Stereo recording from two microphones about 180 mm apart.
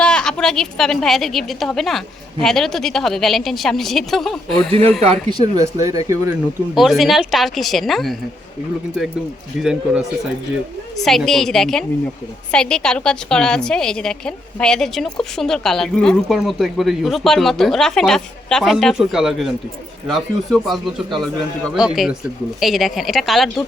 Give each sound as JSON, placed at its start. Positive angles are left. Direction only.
{"t": 0.0, "sound": "a woman's voice", "side_deg": 5}
{"t": 5.0, "sound": "speech", "side_deg": -25}
{"t": 6.7, "sound": "a woman's voice", "side_deg": 0}
{"t": 9.6, "sound": "a woman's voice", "side_deg": -5}
{"t": 21.8, "sound": "a woman's voice", "side_deg": -5}